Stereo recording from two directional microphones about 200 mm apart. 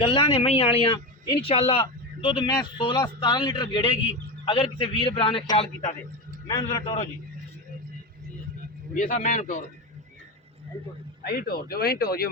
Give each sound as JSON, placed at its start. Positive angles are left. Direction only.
{"t": 0.0, "sound": "speech", "side_deg": 25}
{"t": 6.3, "sound": "music", "side_deg": 20}
{"t": 6.7, "sound": "speech", "side_deg": 25}
{"t": 9.0, "sound": "a man's voice", "side_deg": 40}
{"t": 11.2, "sound": "speech", "side_deg": 50}